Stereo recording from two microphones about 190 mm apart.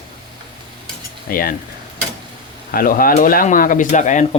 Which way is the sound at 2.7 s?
50° left (ahead or behind).